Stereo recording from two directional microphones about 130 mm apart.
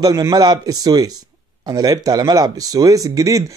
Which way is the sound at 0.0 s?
30° right (ahead or behind).